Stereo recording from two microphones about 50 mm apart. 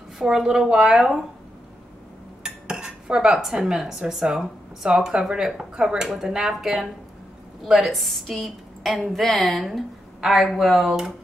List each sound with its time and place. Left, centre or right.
0.2 s a woman's voice: centre
2.4 s dishes: centre
5.6 s a woman's voice: centre
7.9 s a woman's voice: centre